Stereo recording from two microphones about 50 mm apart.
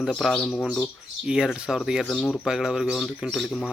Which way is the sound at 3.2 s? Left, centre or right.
Right.